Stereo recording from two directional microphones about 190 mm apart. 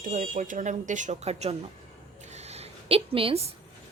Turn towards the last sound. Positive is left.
turn(degrees=-30)  # may be behind; listen again after turning